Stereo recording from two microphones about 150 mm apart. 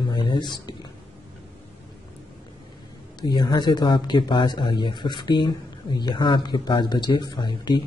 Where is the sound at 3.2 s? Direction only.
30° left (ahead or behind).